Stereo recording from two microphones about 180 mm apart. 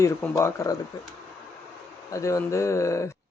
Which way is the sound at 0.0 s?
15° left (ahead or behind).